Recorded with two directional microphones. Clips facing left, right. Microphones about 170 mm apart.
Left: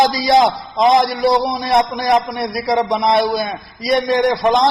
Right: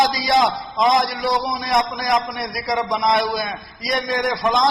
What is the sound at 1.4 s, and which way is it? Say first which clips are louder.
A man's voice: left 5 dB; 30° left (ahead or behind).